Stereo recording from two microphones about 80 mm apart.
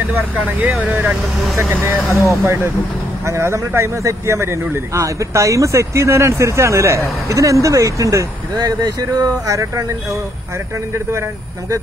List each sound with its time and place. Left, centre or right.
1.0 s speech: centre
2.2 s a man's voice: right
8.5 s speech: right